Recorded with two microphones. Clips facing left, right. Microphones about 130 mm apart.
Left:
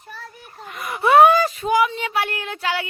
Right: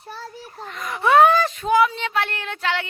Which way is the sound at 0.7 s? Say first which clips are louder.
Left 1 dB; 5° left (ahead or behind).